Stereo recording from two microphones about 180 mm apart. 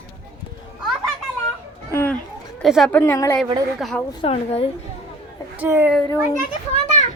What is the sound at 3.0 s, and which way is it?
Speech, 15° left (ahead or behind).